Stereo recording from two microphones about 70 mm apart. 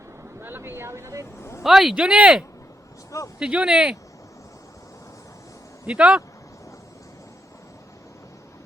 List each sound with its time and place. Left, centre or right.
0.3 s speech: right
1.4 s speech: left
1.6 s speech: centre
5.8 s speech: centre